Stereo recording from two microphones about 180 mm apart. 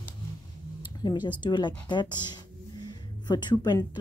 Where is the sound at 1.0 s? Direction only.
25° left (ahead or behind).